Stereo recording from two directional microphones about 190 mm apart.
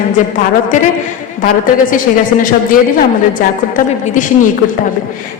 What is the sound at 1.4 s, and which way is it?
A woman's voice, 45° left (ahead or behind).